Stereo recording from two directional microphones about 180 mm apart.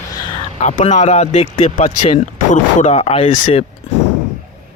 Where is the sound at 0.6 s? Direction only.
40° left (ahead or behind).